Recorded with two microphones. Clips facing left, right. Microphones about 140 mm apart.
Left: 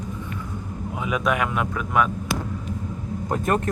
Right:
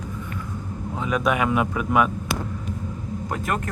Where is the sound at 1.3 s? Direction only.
Centre (ahead or behind).